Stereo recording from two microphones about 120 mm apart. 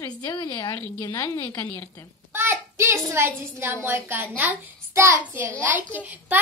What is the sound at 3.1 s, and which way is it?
A woman's voice, 20° right (ahead or behind).